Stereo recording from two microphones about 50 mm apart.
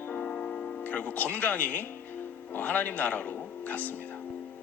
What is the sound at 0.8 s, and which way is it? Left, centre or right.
A man's voice, left.